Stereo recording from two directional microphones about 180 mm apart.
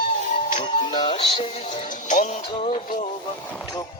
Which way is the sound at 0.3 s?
45° left (ahead or behind).